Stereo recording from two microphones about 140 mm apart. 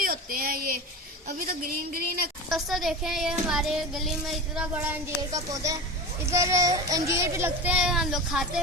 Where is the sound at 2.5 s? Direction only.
Centre (ahead or behind).